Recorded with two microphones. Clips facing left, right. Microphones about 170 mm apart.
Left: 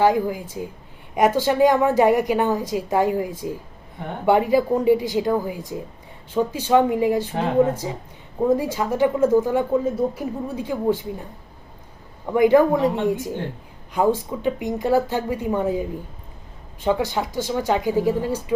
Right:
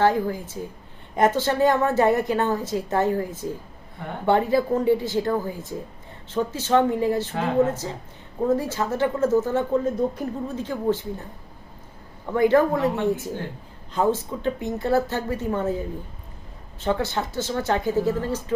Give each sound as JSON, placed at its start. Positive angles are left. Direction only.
{"t": 0.0, "sound": "speech", "side_deg": 15}